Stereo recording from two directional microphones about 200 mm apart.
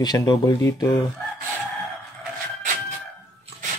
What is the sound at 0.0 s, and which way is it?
Speech, 20° left (ahead or behind).